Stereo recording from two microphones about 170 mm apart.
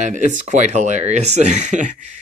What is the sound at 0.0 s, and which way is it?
Speech, 45° right (ahead or behind).